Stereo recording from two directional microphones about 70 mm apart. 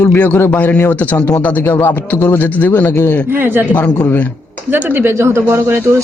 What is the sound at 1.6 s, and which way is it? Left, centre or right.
Speech, left.